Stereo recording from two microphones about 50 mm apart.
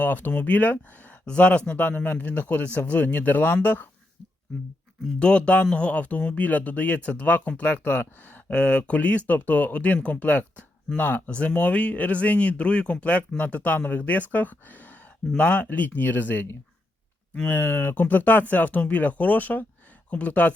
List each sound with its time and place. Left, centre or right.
0.0 s speech: left
5.2 s speech: left
8.5 s speech: left
11.3 s speech: left